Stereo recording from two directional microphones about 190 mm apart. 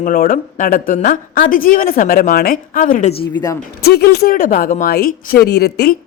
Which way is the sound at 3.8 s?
55° left (ahead or behind).